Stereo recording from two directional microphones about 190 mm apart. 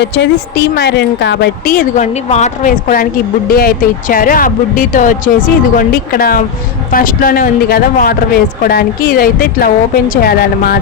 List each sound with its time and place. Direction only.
0.0 s a man's voice: 60° left (ahead or behind)